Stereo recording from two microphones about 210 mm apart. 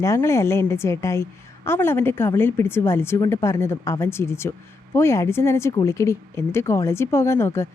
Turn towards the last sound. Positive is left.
turn(degrees=10)  # may be behind; listen again after turning